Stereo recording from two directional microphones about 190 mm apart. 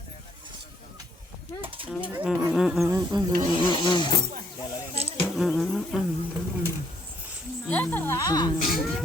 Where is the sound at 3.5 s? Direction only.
25° left (ahead or behind).